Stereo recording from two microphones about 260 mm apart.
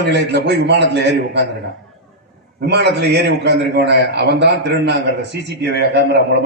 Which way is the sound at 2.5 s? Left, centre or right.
Right.